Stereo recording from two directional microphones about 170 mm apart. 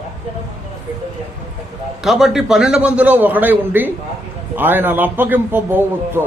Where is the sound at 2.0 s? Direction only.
Centre (ahead or behind).